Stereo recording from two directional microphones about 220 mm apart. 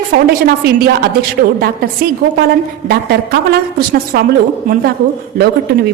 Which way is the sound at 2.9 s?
45° right (ahead or behind).